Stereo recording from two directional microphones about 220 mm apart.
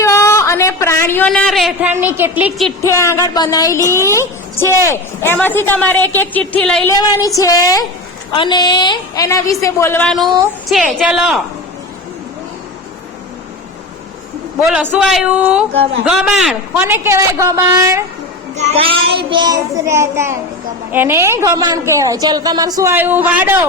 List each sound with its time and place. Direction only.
0.0 s a woman's voice: 15° left (ahead or behind); by 2.7 s 5° right (ahead or behind)
2.8 s a woman's voice: 10° left (ahead or behind)
6.9 s a woman's voice: 15° left (ahead or behind)
10.7 s a man's voice: 5° right (ahead or behind)
14.6 s a man's voice: 5° right (ahead or behind)
18.5 s a woman's voice: 25° right (ahead or behind); by 23.6 s 10° right (ahead or behind)